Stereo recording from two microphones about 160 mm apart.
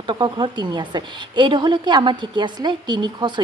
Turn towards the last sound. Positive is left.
turn(degrees=-30)  # may be behind; listen again after turning